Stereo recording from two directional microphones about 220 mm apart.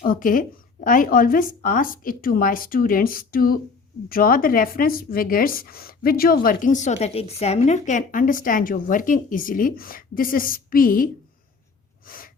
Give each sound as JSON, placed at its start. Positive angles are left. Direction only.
{"t": 0.0, "sound": "speech", "side_deg": 40}
{"t": 12.0, "sound": "sneeze", "side_deg": 40}